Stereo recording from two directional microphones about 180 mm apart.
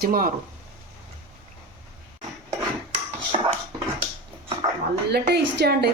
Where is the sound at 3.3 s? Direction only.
35° right (ahead or behind).